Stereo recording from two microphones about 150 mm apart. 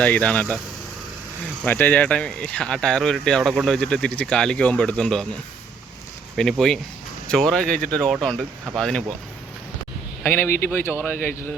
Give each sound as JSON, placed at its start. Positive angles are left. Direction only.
{"t": 0.0, "sound": "speech", "side_deg": 10}
{"t": 1.6, "sound": "speech", "side_deg": 10}
{"t": 6.3, "sound": "speech", "side_deg": 0}
{"t": 10.2, "sound": "speech", "side_deg": 15}